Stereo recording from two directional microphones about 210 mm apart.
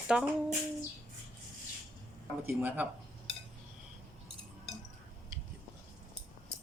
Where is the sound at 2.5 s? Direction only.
10° right (ahead or behind).